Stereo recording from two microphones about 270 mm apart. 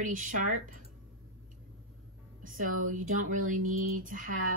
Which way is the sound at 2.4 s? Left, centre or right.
Right.